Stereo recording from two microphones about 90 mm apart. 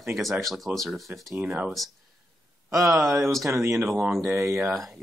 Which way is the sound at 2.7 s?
30° right (ahead or behind).